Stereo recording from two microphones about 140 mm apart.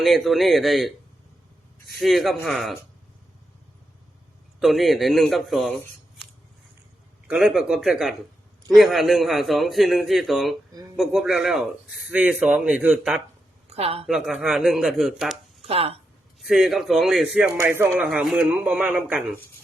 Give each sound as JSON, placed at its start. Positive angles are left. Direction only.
{"t": 0.0, "sound": "a man's voice", "side_deg": 0}
{"t": 2.0, "sound": "a man's voice", "side_deg": 0}
{"t": 4.6, "sound": "a man's voice", "side_deg": 0}
{"t": 7.3, "sound": "a man's voice", "side_deg": -5}
{"t": 13.7, "sound": "speech", "side_deg": -45}
{"t": 14.1, "sound": "a man's voice", "side_deg": -5}
{"t": 15.6, "sound": "speech", "side_deg": -45}
{"t": 16.4, "sound": "a man's voice", "side_deg": 0}
{"t": 17.6, "sound": "a man's voice", "side_deg": -15}
{"t": 18.0, "sound": "a man's voice", "side_deg": 0}